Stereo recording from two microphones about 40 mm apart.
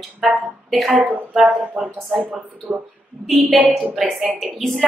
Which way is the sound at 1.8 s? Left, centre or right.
Right.